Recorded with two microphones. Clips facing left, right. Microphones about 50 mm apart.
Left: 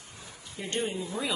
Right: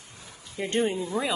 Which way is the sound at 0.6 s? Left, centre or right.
Right.